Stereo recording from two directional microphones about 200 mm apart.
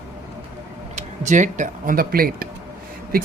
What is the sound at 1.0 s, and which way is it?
Speech, 40° right (ahead or behind).